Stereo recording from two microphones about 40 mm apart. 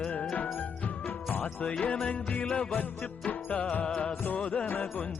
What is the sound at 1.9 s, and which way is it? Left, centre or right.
Jingle bell, left.